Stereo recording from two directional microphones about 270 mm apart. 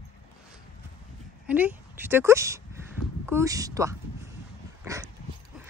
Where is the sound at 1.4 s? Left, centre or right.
Centre.